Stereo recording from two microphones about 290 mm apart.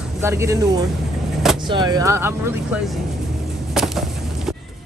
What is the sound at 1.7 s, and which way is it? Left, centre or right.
A man's voice, centre.